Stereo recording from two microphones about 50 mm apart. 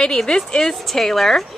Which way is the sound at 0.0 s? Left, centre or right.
Centre.